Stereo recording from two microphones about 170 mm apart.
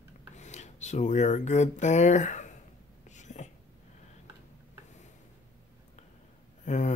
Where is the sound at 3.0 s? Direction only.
45° left (ahead or behind).